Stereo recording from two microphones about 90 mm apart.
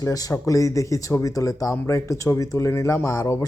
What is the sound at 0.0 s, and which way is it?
Speech, 40° left (ahead or behind).